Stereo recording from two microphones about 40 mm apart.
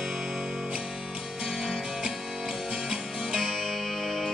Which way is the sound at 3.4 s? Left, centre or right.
Centre.